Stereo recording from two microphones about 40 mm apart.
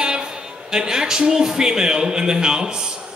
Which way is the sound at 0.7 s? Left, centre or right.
Centre.